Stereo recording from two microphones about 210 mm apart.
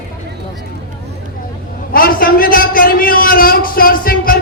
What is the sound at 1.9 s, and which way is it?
A man's voice, 45° left (ahead or behind).